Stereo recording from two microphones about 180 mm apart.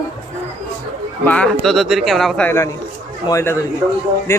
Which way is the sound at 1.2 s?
5° left (ahead or behind).